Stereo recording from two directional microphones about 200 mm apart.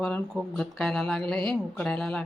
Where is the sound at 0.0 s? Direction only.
Centre (ahead or behind).